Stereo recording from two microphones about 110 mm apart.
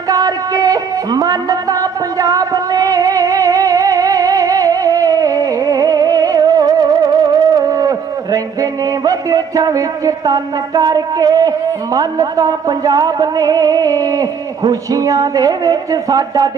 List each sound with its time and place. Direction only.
0.1 s music: 35° right (ahead or behind)
9.0 s speech: 35° right (ahead or behind)